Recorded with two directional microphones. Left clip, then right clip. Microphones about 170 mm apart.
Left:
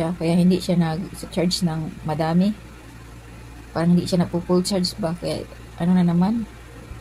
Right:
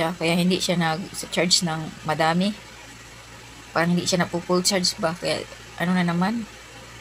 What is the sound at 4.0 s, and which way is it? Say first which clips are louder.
Speech: right 1 dB; centre (ahead or behind).